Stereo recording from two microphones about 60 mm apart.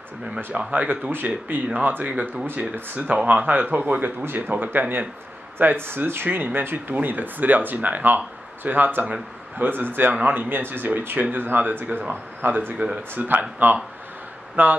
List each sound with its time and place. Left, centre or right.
0.6 s speech: right
2.4 s speech: right
3.0 s speech: right
4.2 s speech: right